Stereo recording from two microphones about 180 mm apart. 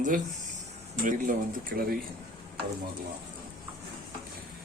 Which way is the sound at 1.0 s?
50° right (ahead or behind).